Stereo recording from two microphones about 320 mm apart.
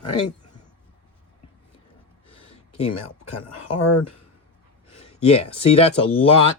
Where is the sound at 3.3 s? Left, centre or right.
Left.